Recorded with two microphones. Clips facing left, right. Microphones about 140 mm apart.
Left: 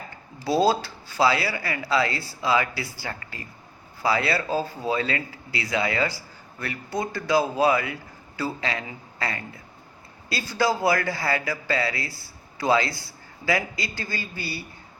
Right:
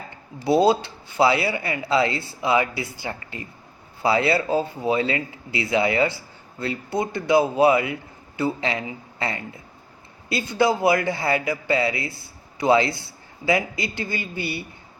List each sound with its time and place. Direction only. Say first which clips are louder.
0.4 s speech: right 3 dB; 20° right (ahead or behind)